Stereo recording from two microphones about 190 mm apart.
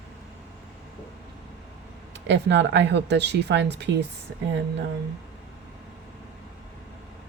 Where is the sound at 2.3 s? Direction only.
70° right (ahead or behind).